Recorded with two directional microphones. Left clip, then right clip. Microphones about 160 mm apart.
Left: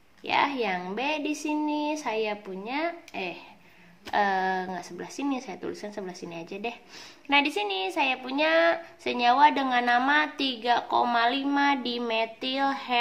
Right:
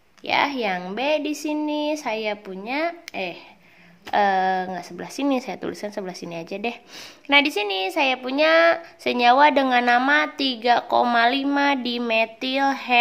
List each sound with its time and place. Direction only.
0.2 s a woman's voice: 35° right (ahead or behind)